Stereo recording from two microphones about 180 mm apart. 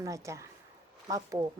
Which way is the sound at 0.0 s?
15° right (ahead or behind).